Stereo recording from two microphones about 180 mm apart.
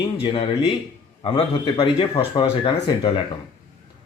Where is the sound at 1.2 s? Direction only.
30° left (ahead or behind).